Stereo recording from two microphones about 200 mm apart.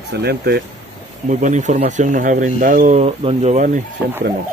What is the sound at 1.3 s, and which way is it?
Speech, 35° right (ahead or behind).